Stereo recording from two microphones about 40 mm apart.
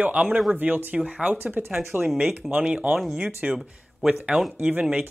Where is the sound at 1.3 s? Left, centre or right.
Right.